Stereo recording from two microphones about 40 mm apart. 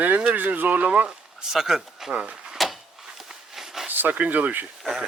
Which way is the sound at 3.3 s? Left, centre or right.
Centre.